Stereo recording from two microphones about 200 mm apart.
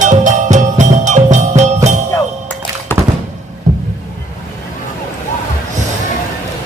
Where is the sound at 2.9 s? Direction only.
10° left (ahead or behind).